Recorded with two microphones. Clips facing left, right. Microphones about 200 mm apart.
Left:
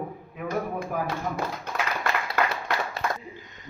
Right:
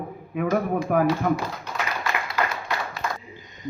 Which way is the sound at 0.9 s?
65° right (ahead or behind).